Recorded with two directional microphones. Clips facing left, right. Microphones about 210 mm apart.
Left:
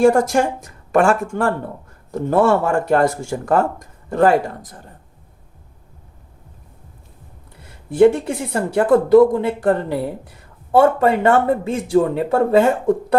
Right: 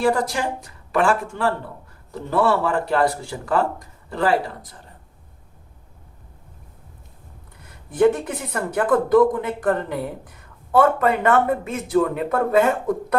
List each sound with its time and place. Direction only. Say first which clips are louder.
0.0 s speech: left 7 dB; 45° left (ahead or behind)
7.9 s speech: left 5 dB; 25° left (ahead or behind)